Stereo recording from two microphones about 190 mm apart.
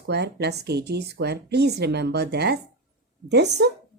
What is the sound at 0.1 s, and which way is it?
Speech, 60° right (ahead or behind).